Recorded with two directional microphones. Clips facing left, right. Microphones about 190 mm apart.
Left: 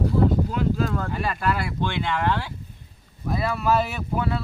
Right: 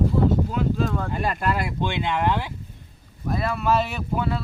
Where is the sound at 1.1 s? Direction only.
20° right (ahead or behind).